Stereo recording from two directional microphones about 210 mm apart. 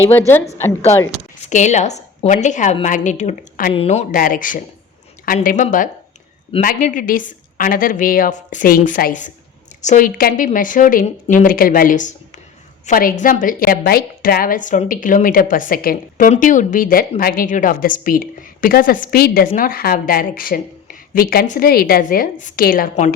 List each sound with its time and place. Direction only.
0.0 s a woman's voice: 10° left (ahead or behind)
1.5 s a woman's voice: 35° left (ahead or behind)